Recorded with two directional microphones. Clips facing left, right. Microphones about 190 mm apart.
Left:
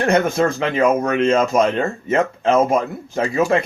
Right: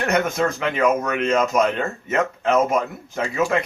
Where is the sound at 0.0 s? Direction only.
30° left (ahead or behind).